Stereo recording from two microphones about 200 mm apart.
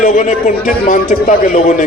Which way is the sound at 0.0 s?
40° left (ahead or behind).